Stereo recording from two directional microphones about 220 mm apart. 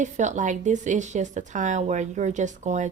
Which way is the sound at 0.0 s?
35° right (ahead or behind).